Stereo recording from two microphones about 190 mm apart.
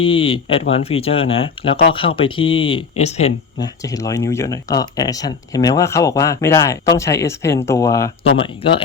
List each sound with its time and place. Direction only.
0.0 s speech: 30° left (ahead or behind)
3.6 s speech: 20° left (ahead or behind)
8.4 s speech: 30° left (ahead or behind)